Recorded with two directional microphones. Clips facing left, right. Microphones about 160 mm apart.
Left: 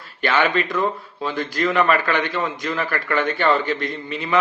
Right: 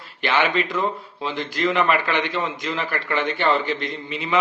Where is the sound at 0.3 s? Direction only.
20° right (ahead or behind).